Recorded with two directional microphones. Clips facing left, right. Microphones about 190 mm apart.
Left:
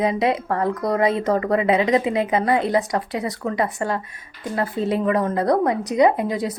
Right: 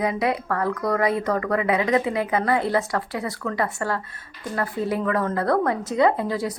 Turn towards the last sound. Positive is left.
turn(degrees=20)  # may be behind; listen again after turning